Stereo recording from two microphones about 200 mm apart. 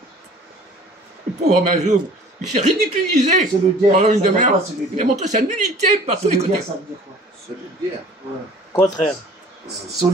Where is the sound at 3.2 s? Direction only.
35° right (ahead or behind).